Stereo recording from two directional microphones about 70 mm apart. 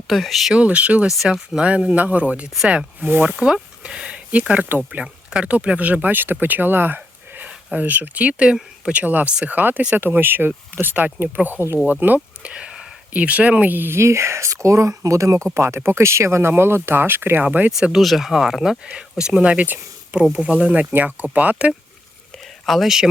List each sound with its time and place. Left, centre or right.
0.1 s speech: centre
0.5 s speech: centre
1.0 s speech: centre; by 3.2 s right
3.2 s speech: centre
18.0 s speech: centre; by 21.2 s right
21.5 s speech: centre